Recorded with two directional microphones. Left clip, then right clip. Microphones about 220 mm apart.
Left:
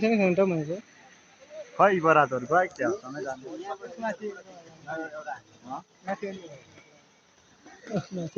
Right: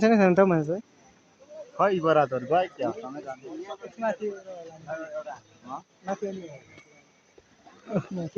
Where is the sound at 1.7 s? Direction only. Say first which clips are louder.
Left 2 dB; 15° right (ahead or behind).